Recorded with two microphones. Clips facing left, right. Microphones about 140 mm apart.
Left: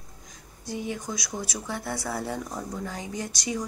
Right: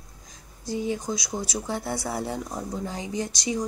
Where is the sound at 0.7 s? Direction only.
30° right (ahead or behind).